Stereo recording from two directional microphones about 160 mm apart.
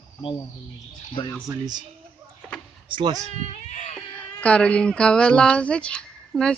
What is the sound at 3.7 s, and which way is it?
Speech, 45° left (ahead or behind).